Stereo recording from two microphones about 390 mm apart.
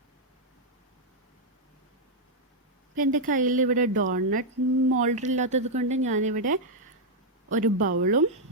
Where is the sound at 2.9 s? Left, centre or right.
Centre.